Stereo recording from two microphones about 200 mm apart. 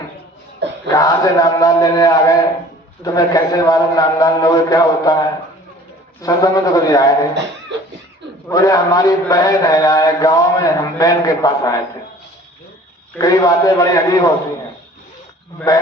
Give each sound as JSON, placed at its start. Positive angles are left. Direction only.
{"t": 0.6, "sound": "a sound", "side_deg": -60}
{"t": 0.9, "sound": "a man's voice", "side_deg": 15}
{"t": 8.4, "sound": "a man's voice", "side_deg": 15}
{"t": 13.1, "sound": "a man's voice", "side_deg": 15}
{"t": 15.7, "sound": "a man's voice", "side_deg": 15}